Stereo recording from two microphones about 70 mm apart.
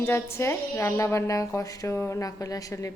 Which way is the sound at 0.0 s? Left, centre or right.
Left.